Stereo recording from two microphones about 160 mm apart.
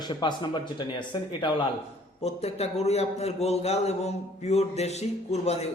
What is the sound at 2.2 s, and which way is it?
A man's voice, 40° left (ahead or behind).